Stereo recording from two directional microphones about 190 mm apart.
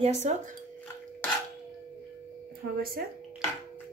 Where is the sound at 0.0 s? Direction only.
35° right (ahead or behind).